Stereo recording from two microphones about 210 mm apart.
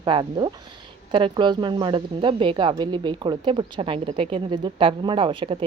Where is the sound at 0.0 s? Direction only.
25° right (ahead or behind).